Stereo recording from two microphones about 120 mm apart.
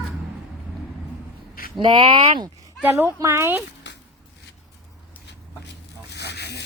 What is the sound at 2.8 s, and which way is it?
Speech, 15° right (ahead or behind).